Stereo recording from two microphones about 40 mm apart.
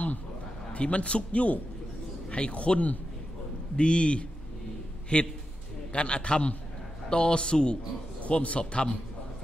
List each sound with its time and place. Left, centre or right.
0.7 s a man's voice: left
8.2 s a man's voice: left